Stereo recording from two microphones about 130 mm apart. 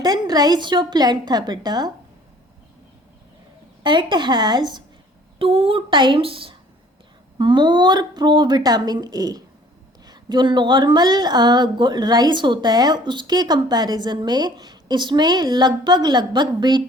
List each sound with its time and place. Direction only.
0.0 s a woman's voice: 30° right (ahead or behind)
3.8 s a woman's voice: 35° right (ahead or behind)
5.4 s a woman's voice: 45° right (ahead or behind)